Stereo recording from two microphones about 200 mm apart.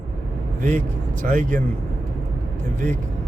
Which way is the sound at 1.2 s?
40° right (ahead or behind).